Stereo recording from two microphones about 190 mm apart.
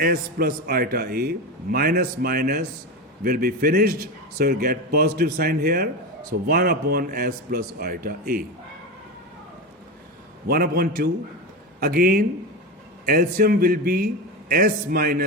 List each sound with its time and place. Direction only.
0.0 s a man's voice: 50° right (ahead or behind)
10.5 s a man's voice: 50° right (ahead or behind)